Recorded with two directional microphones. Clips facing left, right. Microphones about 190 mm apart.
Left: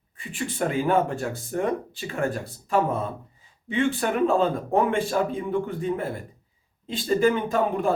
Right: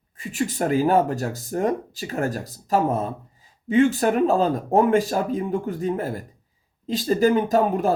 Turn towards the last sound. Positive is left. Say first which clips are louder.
# right 4 dB
turn(degrees=-40)  # may be behind; listen again after turning